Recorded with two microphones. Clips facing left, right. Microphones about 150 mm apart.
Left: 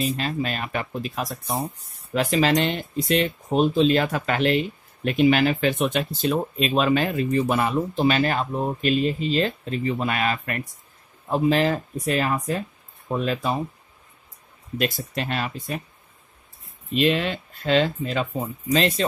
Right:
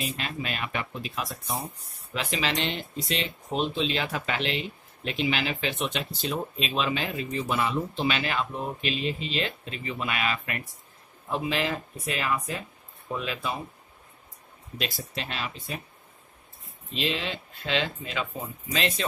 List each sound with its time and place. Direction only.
0.0 s speech: 40° left (ahead or behind)
15.1 s speech: 50° left (ahead or behind)
16.9 s speech: 55° left (ahead or behind); by 19.0 s 35° left (ahead or behind)